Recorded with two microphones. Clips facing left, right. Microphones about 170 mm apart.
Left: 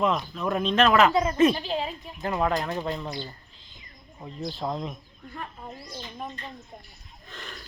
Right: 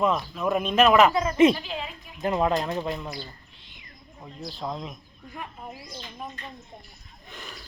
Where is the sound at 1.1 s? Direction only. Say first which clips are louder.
Left 2 dB; 20° left (ahead or behind).